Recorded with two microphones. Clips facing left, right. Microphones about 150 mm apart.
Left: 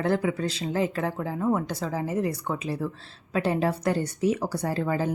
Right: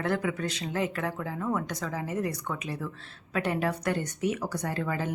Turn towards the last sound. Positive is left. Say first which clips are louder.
# left 4 dB
turn(degrees=35)  # may be behind; listen again after turning